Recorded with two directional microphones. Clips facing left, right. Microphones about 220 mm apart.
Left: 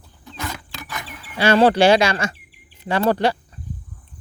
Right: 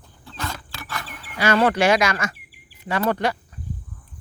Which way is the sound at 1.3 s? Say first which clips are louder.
Left 4 dB; 30° left (ahead or behind).